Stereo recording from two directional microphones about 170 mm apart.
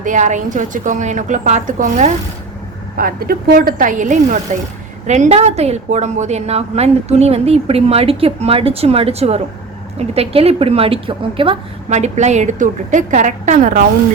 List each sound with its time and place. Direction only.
0.0 s a woman's voice: 45° right (ahead or behind)
3.0 s a woman's voice: 60° right (ahead or behind)